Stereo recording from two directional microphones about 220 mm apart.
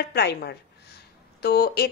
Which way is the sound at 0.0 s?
45° left (ahead or behind).